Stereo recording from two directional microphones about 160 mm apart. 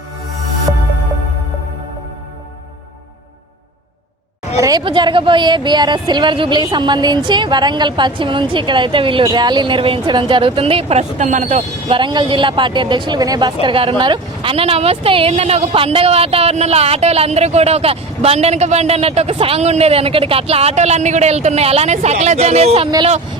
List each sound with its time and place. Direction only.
4.6 s speech: 30° right (ahead or behind); by 11.6 s 50° right (ahead or behind)
11.9 s speech: 30° right (ahead or behind)